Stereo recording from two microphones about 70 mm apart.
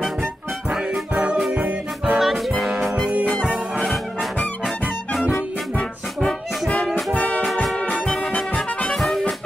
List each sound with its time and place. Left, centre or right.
0.7 s music: centre
2.1 s music: centre
3.8 s music: centre
7.2 s music: left
8.9 s music: centre